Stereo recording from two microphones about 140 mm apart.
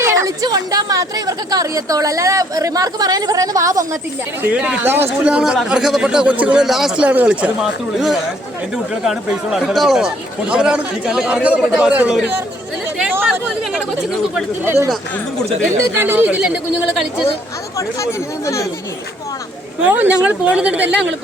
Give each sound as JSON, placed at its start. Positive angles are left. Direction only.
{"t": 0.0, "sound": "speech", "side_deg": -20}
{"t": 4.4, "sound": "speech", "side_deg": -10}
{"t": 14.6, "sound": "speech", "side_deg": -15}
{"t": 16.0, "sound": "speech", "side_deg": -15}
{"t": 17.7, "sound": "speech", "side_deg": 20}
{"t": 19.8, "sound": "speech", "side_deg": -10}